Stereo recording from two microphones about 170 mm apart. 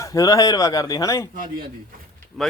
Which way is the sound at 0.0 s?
20° left (ahead or behind).